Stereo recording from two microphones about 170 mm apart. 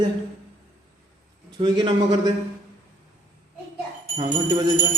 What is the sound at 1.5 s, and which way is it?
Speech, 25° right (ahead or behind).